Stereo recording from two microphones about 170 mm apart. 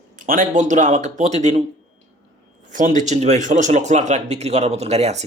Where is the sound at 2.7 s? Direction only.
50° right (ahead or behind).